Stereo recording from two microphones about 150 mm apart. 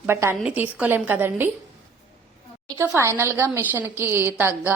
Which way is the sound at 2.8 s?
15° right (ahead or behind).